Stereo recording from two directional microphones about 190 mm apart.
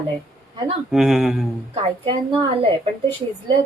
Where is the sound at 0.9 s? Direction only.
Centre (ahead or behind).